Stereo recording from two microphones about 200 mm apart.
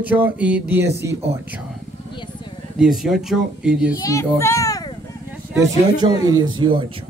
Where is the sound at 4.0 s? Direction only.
15° left (ahead or behind).